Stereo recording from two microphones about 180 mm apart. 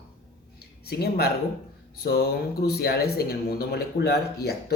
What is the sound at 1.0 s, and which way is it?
Speech, 60° left (ahead or behind).